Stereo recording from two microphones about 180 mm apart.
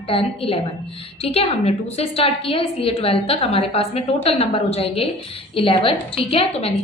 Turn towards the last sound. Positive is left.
turn(degrees=35)  # may be behind; listen again after turning